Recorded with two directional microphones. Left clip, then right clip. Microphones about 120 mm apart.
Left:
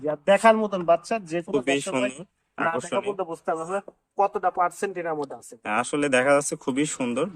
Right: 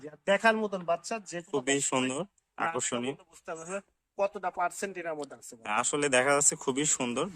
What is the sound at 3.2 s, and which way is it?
Speech, 15° right (ahead or behind).